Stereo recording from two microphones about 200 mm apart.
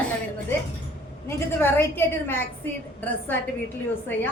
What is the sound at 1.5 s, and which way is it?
Speech, 10° left (ahead or behind).